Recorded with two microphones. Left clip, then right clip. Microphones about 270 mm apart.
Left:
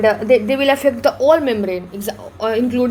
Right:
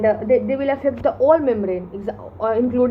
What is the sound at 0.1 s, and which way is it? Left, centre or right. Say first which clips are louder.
Speech: left 3 dB; left.